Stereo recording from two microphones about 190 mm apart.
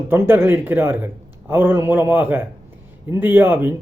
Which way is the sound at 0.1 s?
10° right (ahead or behind).